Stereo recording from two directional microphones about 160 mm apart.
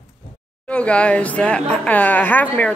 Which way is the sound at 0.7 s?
5° left (ahead or behind).